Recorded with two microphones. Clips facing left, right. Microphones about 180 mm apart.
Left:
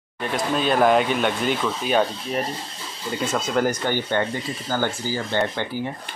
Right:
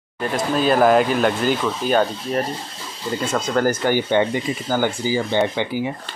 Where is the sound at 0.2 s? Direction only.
Centre (ahead or behind).